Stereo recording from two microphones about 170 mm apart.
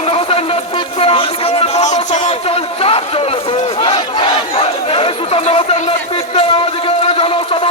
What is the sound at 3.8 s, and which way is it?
Chatter, 30° left (ahead or behind).